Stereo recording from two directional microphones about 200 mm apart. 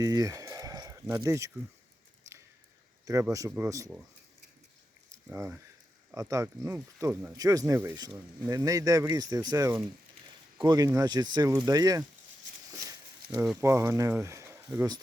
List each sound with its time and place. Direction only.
0.0 s a sound: 15° right (ahead or behind)
1.0 s speech: 15° right (ahead or behind)
3.3 s speech: 15° right (ahead or behind)
5.3 s speech: 10° right (ahead or behind)
13.2 s a sound: 50° right (ahead or behind)
13.6 s speech: 15° right (ahead or behind)